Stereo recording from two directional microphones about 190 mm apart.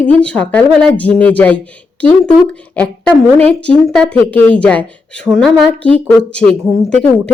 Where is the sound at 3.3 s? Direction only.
5° left (ahead or behind).